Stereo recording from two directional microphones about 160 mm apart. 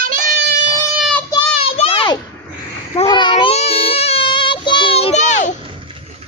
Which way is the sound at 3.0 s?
30° left (ahead or behind).